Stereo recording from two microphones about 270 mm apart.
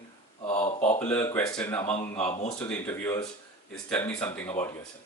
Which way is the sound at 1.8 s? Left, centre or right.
Left.